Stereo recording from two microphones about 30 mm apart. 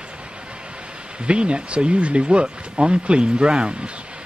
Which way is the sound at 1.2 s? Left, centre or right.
Right.